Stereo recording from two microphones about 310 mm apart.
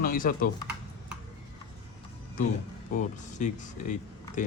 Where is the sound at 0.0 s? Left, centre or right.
Left.